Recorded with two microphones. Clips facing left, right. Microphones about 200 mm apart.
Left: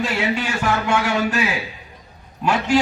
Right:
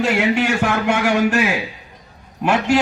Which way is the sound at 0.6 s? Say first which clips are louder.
Right 2 dB; 60° right (ahead or behind).